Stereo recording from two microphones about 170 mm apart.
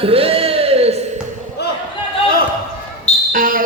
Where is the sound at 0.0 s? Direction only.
35° right (ahead or behind).